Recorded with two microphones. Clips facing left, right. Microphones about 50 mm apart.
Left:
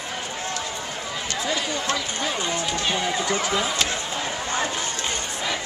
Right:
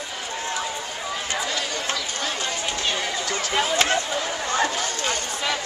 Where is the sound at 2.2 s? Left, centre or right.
Centre.